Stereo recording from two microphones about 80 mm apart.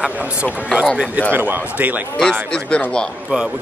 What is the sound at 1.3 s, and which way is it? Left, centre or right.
Speech, right.